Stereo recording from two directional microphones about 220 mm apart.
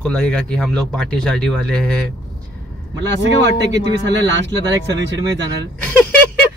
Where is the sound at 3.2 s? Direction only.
55° right (ahead or behind).